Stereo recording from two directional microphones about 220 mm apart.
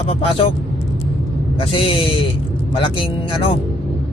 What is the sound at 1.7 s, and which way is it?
Speech, 25° left (ahead or behind).